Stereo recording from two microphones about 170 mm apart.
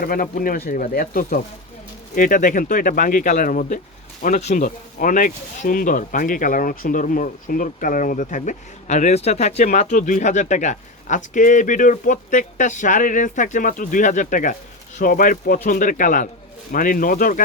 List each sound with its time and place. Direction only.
0.0 s speech: 55° left (ahead or behind)